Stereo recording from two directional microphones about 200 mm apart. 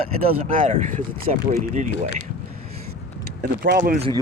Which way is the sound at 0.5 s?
40° right (ahead or behind).